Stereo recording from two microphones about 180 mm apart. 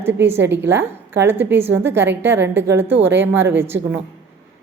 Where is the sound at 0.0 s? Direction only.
10° right (ahead or behind).